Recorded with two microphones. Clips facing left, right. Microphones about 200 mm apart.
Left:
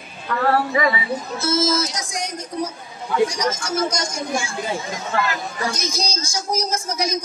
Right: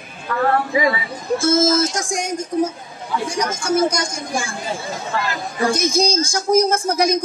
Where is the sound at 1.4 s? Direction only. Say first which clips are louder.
Right 5 dB; 50° right (ahead or behind).